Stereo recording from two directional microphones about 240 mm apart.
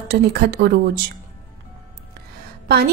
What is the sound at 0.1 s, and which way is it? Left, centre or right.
Speech, right.